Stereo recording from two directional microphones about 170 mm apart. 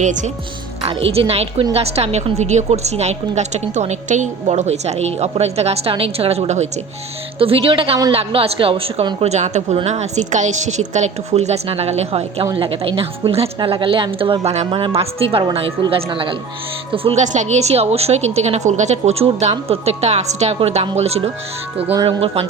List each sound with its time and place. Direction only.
0.0 s speech: 45° right (ahead or behind)
0.9 s a woman's voice: 35° right (ahead or behind)